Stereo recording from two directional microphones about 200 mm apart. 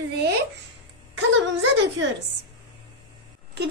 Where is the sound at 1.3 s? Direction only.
70° right (ahead or behind).